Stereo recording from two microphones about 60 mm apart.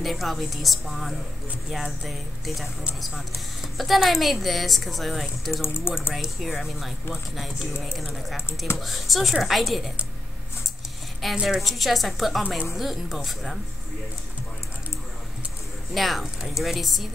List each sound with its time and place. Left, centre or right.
0.0 s a woman's voice: centre
3.7 s a woman's voice: centre
5.6 s speech: left
6.1 s a woman's voice: centre
11.4 s a woman's voice: centre
15.9 s a woman's voice: centre